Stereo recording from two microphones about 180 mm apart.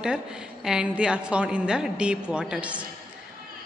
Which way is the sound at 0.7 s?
5° right (ahead or behind).